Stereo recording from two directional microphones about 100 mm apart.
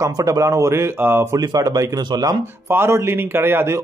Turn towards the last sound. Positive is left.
turn(degrees=-25)  # may be behind; listen again after turning